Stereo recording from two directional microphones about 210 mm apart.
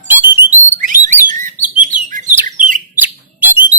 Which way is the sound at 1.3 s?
40° right (ahead or behind).